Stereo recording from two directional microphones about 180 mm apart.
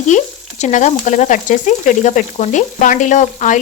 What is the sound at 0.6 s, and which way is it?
Frying, 40° left (ahead or behind).